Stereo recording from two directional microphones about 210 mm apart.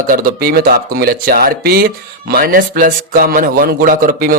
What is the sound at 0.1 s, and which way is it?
A man's voice, 45° right (ahead or behind).